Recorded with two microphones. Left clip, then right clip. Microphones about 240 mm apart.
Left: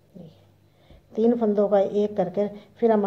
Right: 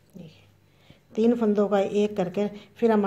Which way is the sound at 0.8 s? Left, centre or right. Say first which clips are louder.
Left 1 dB; right.